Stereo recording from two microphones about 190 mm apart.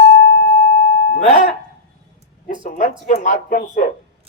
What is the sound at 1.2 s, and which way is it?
Speech, 40° left (ahead or behind).